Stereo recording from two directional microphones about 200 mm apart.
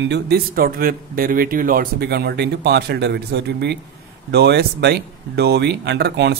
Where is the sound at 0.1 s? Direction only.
50° right (ahead or behind).